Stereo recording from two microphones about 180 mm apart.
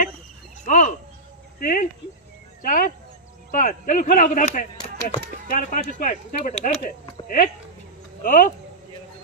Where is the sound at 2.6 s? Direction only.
50° left (ahead or behind).